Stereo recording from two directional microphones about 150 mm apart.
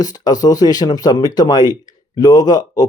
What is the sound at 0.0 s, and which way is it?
Speech, 25° left (ahead or behind).